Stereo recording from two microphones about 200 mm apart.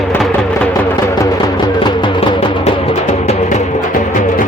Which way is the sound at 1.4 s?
20° left (ahead or behind).